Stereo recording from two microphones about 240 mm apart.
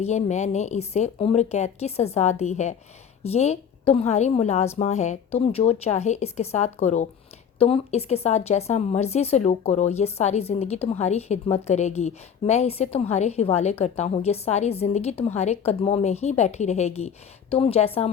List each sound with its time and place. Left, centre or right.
0.0 s speech: left